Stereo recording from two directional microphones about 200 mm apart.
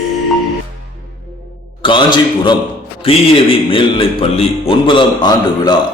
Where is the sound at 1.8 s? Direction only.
25° left (ahead or behind).